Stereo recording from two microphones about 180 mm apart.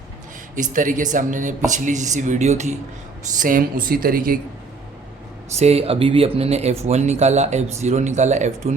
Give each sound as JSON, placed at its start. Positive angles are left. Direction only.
{"t": 0.5, "sound": "speech", "side_deg": -45}
{"t": 5.5, "sound": "speech", "side_deg": -35}